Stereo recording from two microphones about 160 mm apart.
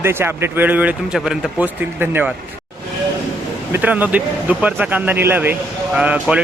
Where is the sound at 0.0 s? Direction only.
15° right (ahead or behind).